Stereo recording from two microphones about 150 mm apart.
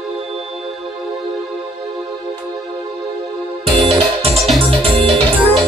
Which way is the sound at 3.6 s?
40° right (ahead or behind).